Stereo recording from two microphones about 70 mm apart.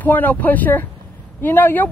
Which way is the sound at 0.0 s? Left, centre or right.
Left.